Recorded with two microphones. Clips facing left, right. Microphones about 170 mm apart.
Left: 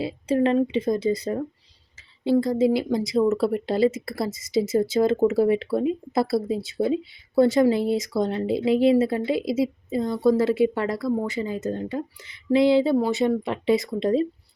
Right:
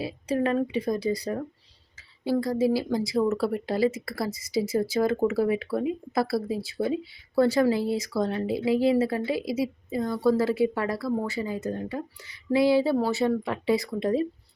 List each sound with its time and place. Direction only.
0.0 s speech: 25° left (ahead or behind)